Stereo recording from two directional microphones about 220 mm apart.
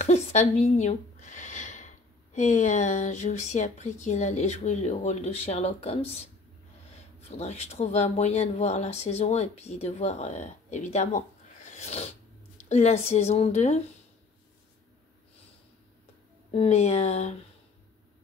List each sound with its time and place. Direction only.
0.0 s a sound: 30° left (ahead or behind)
2.3 s speech: 35° left (ahead or behind)
7.2 s speech: 30° left (ahead or behind)
16.5 s speech: 30° left (ahead or behind)